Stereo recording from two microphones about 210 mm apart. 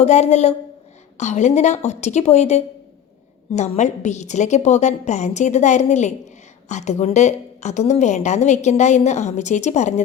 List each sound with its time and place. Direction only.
0.0 s a woman's voice: 30° left (ahead or behind)